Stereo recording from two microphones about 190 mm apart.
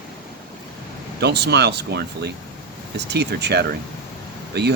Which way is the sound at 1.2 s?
60° right (ahead or behind).